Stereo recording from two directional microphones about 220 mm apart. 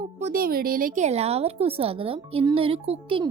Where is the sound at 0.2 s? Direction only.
40° right (ahead or behind).